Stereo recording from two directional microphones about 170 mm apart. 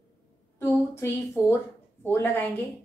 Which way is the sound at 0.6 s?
15° left (ahead or behind).